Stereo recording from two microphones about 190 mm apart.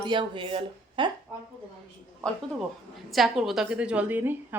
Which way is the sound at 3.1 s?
Centre (ahead or behind).